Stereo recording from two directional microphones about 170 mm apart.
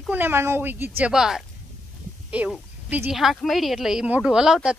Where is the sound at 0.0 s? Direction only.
10° right (ahead or behind).